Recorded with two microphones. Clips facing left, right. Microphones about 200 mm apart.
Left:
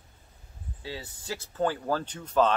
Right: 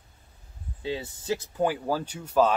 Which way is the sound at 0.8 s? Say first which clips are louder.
Right 8 dB; 20° right (ahead or behind).